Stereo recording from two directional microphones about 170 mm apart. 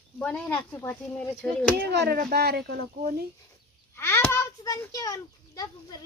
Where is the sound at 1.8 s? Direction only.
70° right (ahead or behind).